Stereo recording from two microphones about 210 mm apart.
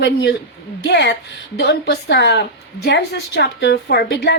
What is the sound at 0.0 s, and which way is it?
A woman's voice, 55° left (ahead or behind).